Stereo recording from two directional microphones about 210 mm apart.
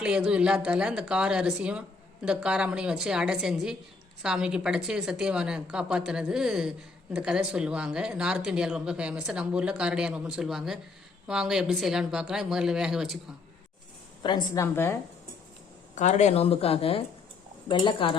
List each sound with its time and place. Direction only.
0.0 s a woman's voice: 5° right (ahead or behind)
14.2 s a woman's voice: 20° left (ahead or behind)
16.0 s speech: 35° left (ahead or behind)